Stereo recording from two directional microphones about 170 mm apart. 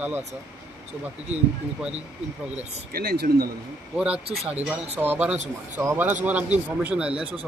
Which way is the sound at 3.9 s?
5° right (ahead or behind).